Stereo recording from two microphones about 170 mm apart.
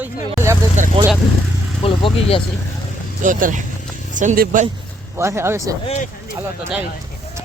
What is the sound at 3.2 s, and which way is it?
Speech, 50° right (ahead or behind).